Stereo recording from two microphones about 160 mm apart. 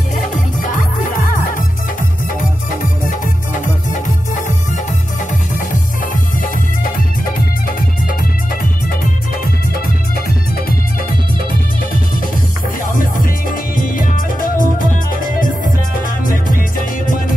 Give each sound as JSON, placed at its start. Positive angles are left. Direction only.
{"t": 1.1, "sound": "music", "side_deg": 55}
{"t": 12.9, "sound": "music", "side_deg": 60}
{"t": 16.3, "sound": "music", "side_deg": 60}